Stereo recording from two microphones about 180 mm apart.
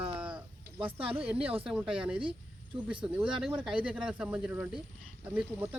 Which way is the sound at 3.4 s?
5° right (ahead or behind).